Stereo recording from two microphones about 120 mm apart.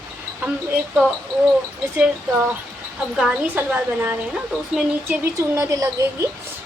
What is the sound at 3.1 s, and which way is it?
A woman's voice, 5° right (ahead or behind).